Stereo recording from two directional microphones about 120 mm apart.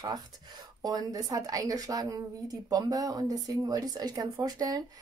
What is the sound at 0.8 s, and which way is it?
A woman's voice, 30° right (ahead or behind).